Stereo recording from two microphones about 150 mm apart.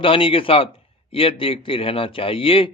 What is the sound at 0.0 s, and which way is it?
Speech, 35° left (ahead or behind).